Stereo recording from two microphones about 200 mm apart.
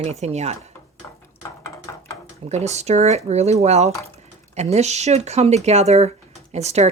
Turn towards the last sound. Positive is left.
turn(degrees=-35)  # may be behind; listen again after turning